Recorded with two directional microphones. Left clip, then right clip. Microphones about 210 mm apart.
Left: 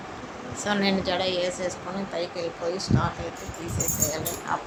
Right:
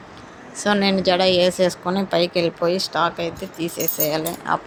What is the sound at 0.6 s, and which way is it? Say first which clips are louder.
Speech: right 7 dB; 35° right (ahead or behind).